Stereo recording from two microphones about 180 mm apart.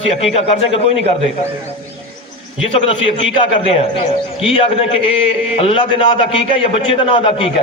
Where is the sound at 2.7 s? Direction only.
30° left (ahead or behind).